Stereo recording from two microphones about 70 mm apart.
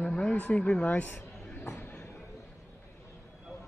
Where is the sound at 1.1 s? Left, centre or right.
Left.